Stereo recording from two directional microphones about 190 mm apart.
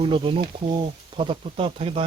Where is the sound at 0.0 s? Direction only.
25° right (ahead or behind).